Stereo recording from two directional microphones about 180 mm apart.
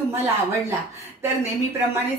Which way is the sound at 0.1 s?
15° right (ahead or behind).